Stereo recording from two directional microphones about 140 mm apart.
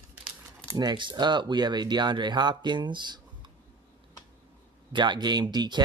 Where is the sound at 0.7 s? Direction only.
30° right (ahead or behind).